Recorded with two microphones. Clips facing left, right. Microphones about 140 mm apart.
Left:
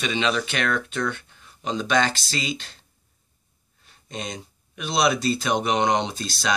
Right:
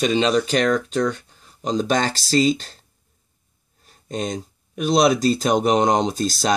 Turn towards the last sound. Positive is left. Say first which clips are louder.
# right 6 dB
turn(degrees=-45)  # may be behind; listen again after turning